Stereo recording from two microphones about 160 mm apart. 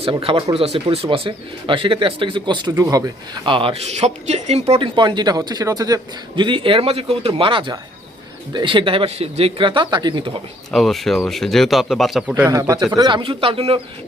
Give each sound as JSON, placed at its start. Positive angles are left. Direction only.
{"t": 0.0, "sound": "a man's voice", "side_deg": -35}
{"t": 3.4, "sound": "a man's voice", "side_deg": -35}
{"t": 4.7, "sound": "a man's voice", "side_deg": -30}
{"t": 10.7, "sound": "speech", "side_deg": 0}
{"t": 12.5, "sound": "speech", "side_deg": -20}